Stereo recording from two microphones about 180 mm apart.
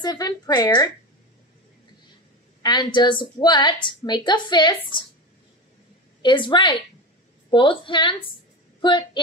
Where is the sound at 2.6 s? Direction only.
25° left (ahead or behind).